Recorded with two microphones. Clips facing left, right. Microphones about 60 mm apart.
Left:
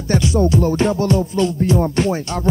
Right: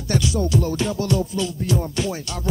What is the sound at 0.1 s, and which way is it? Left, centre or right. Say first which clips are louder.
Music: left 5 dB; left.